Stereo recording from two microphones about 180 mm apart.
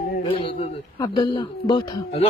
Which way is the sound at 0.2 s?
30° left (ahead or behind).